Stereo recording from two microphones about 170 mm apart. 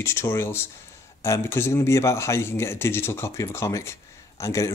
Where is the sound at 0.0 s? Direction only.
15° left (ahead or behind).